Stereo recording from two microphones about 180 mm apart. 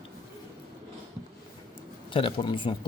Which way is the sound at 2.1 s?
30° left (ahead or behind).